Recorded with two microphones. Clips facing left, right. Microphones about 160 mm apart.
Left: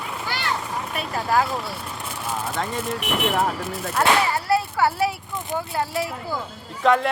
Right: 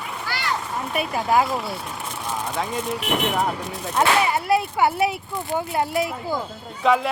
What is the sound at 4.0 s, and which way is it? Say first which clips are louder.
Speech: right 1 dB; 20° right (ahead or behind).